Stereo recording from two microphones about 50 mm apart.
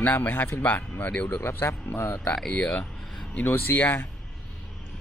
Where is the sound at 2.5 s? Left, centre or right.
Centre.